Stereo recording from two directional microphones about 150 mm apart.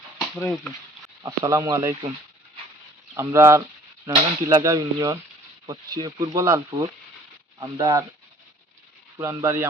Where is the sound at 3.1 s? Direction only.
20° right (ahead or behind).